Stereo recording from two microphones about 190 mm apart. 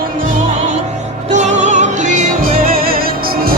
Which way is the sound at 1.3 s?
40° right (ahead or behind).